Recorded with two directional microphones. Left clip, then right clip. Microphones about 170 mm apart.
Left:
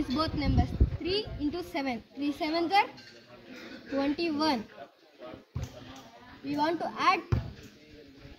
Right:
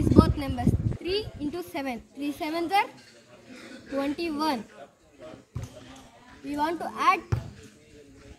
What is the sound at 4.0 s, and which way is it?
Speech, 5° left (ahead or behind).